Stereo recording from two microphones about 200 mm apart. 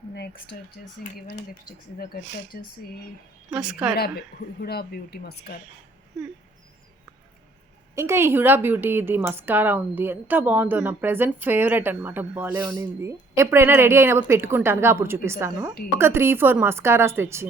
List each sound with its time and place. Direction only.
0.1 s speech: 55° left (ahead or behind)
1.3 s speech: 45° left (ahead or behind)
3.5 s a woman's voice: 5° right (ahead or behind)
3.9 s speech: 50° left (ahead or behind)
7.9 s a woman's voice: 15° right (ahead or behind)